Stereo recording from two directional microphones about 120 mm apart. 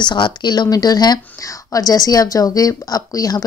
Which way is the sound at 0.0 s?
40° left (ahead or behind).